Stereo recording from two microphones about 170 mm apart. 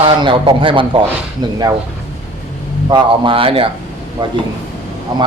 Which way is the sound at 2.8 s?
25° right (ahead or behind).